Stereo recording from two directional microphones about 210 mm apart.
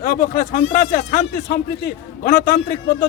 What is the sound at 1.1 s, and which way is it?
Speech, 50° left (ahead or behind).